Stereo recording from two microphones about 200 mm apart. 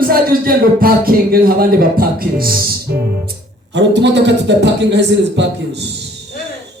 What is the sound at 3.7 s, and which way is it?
A man's voice, 60° right (ahead or behind).